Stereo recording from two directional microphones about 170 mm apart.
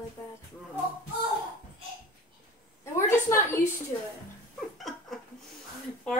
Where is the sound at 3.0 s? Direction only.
15° left (ahead or behind).